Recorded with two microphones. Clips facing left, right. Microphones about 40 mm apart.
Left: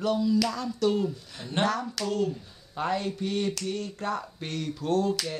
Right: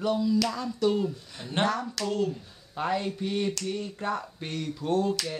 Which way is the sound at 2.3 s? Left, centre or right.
Centre.